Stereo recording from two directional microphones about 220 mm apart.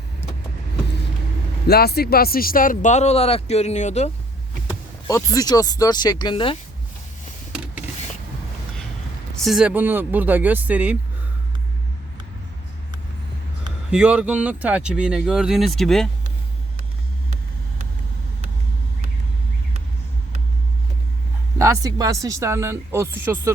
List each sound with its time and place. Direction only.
1.6 s speech: 45° left (ahead or behind)
5.0 s speech: 15° left (ahead or behind)
7.5 s a sound: 5° right (ahead or behind)
9.4 s speech: centre (ahead or behind)
13.9 s speech: 5° right (ahead or behind)
21.6 s speech: 15° right (ahead or behind)